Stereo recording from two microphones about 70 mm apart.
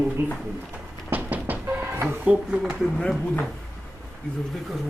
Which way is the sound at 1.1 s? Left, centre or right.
Right.